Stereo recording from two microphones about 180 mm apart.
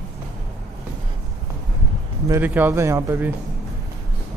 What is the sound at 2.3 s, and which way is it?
A man's voice, 10° right (ahead or behind).